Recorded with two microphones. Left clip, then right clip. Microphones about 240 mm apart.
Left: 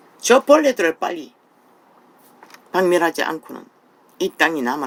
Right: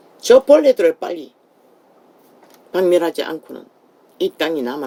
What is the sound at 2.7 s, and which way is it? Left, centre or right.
Speech, left.